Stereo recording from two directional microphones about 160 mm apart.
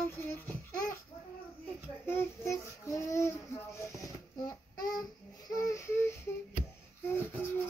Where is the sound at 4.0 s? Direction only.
25° left (ahead or behind).